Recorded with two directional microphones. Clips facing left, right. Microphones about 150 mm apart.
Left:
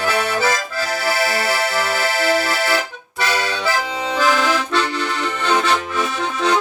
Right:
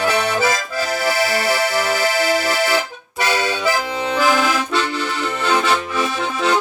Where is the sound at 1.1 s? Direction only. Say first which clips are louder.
Right 1 dB; 20° right (ahead or behind).